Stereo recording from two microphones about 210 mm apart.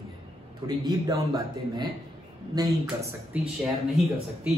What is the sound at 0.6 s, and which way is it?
A man's voice, 20° right (ahead or behind).